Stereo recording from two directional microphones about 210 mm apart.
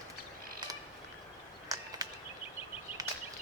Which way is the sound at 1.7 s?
15° right (ahead or behind).